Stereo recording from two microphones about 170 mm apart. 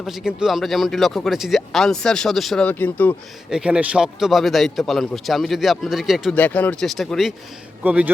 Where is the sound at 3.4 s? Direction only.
5° right (ahead or behind).